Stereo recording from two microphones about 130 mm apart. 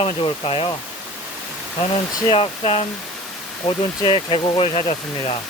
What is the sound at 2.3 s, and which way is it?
Speech, 45° left (ahead or behind).